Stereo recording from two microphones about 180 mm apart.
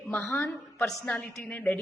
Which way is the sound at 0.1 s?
10° left (ahead or behind).